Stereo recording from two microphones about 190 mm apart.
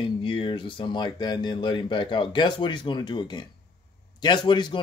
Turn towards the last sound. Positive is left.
turn(degrees=25)  # may be behind; listen again after turning